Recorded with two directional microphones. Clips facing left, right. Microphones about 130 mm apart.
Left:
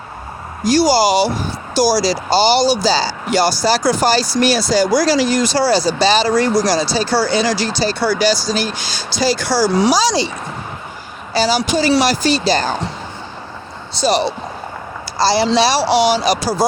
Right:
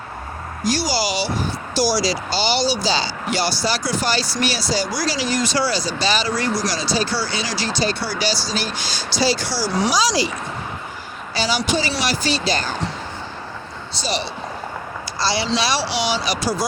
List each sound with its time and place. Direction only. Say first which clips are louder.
0.7 s speech: left 10 dB; 45° left (ahead or behind)
5.5 s speech: left 7 dB; 35° left (ahead or behind)
9.9 s speech: left 4 dB; 30° left (ahead or behind)
11.3 s speech: left 6 dB; 40° left (ahead or behind)
14.0 s speech: left 10 dB; 40° left (ahead or behind)